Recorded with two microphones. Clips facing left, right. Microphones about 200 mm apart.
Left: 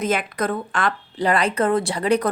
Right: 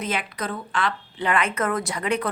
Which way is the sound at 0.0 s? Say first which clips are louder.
Left 6 dB; 45° left (ahead or behind).